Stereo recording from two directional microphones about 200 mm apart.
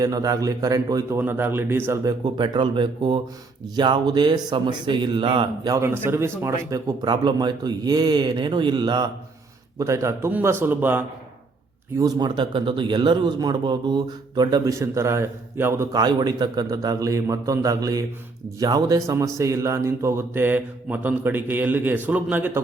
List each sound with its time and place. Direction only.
0.0 s a man's voice: 20° right (ahead or behind)
11.9 s a man's voice: 20° right (ahead or behind)